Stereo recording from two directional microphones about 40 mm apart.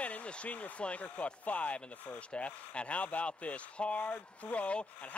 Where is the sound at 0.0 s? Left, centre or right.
Left.